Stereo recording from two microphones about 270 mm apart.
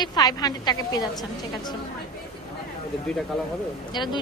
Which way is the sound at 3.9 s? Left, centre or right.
Centre.